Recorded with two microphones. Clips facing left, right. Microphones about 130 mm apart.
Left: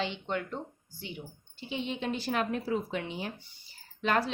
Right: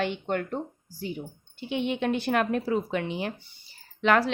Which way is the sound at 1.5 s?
60° right (ahead or behind).